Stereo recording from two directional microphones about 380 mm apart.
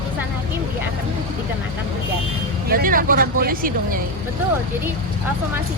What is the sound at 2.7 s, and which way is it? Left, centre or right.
Speech, right.